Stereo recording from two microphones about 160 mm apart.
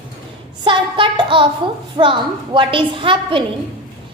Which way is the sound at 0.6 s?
30° right (ahead or behind).